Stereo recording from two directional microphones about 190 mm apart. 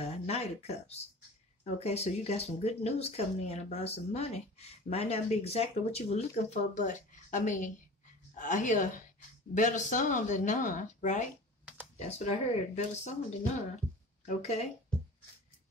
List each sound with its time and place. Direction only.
0.0 s speech: 35° left (ahead or behind)
14.2 s speech: 35° left (ahead or behind)